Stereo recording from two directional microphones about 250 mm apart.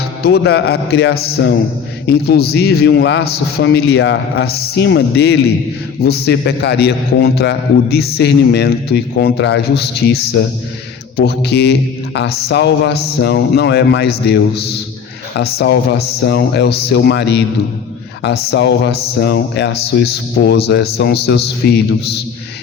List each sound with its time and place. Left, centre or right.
0.2 s a man's voice: left